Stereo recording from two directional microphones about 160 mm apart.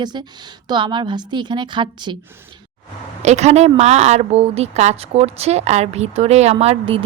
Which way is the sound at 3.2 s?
45° right (ahead or behind).